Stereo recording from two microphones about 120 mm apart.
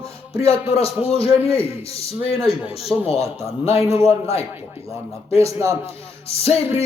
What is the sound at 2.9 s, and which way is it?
Speech, 20° right (ahead or behind).